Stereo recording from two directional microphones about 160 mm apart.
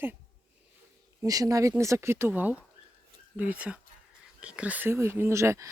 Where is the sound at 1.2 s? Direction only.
20° right (ahead or behind).